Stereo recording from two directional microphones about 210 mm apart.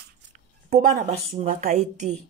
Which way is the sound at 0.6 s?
35° right (ahead or behind).